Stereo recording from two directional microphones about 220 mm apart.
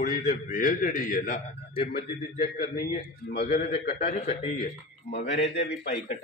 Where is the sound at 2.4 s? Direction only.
40° left (ahead or behind).